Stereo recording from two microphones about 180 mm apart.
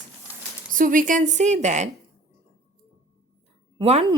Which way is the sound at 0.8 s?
50° right (ahead or behind).